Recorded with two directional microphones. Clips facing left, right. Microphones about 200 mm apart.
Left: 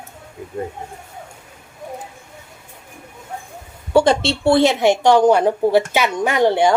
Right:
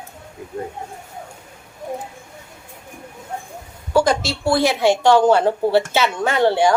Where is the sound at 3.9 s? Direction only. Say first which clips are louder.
Left 3 dB; 30° left (ahead or behind).